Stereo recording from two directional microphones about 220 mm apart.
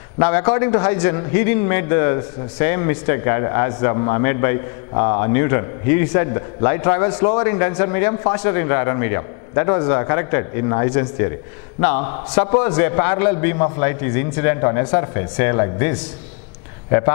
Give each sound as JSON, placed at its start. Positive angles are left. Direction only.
{"t": 0.2, "sound": "a man's voice", "side_deg": 15}